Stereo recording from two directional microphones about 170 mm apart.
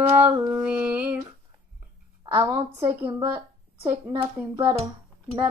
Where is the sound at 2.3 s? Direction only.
15° right (ahead or behind).